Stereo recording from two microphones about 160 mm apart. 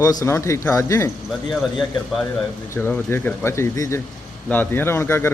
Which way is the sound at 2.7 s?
15° left (ahead or behind).